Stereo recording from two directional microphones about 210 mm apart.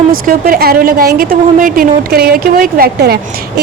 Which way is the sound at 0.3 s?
45° right (ahead or behind).